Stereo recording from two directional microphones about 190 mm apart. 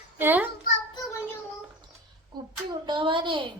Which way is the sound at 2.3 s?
20° right (ahead or behind).